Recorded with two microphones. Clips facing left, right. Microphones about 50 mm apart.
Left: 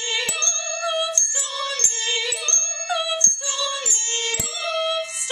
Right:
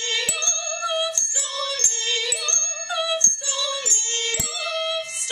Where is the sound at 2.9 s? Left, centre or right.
Centre.